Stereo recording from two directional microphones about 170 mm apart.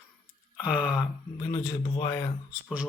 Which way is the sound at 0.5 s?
5° right (ahead or behind).